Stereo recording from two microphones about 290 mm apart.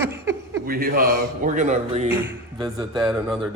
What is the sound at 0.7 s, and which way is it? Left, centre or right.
A man's voice, right.